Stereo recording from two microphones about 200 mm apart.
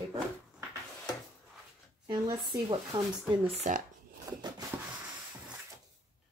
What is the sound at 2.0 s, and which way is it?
Speech, 20° right (ahead or behind).